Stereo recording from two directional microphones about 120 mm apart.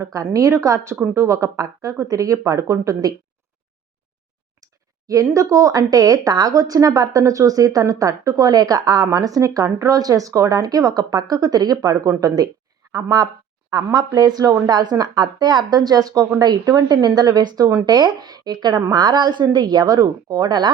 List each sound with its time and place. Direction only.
0.0 s speech: 25° right (ahead or behind)
4.6 s speech: 30° right (ahead or behind)